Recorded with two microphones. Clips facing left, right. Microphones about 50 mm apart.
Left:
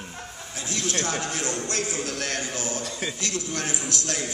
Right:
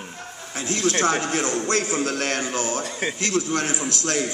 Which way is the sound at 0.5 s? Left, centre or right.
Right.